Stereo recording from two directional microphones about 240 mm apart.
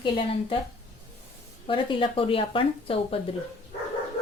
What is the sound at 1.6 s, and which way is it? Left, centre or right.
Speech, left.